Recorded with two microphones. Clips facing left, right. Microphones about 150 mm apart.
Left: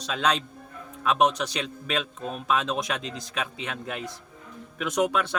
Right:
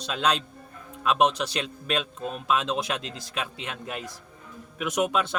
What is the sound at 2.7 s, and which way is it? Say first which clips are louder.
Speech: even; 25° right (ahead or behind).